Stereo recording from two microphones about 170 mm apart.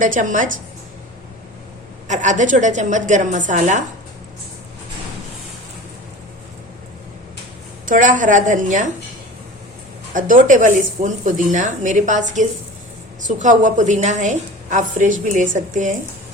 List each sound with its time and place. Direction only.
0.0 s a woman's voice: 50° right (ahead or behind)
2.0 s a woman's voice: 45° right (ahead or behind)
7.9 s a woman's voice: 50° right (ahead or behind)
10.2 s a woman's voice: 50° right (ahead or behind)